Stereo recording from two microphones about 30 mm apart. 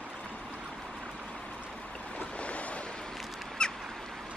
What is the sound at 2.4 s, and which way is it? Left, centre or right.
Waves, left.